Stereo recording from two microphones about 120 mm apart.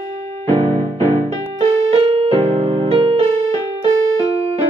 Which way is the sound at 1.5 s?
50° right (ahead or behind).